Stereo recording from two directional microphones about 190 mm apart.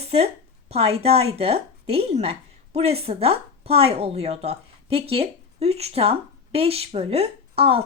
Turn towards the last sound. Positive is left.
turn(degrees=-30)  # may be behind; listen again after turning